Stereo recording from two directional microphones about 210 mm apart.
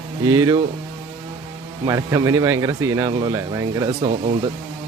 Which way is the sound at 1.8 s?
15° right (ahead or behind).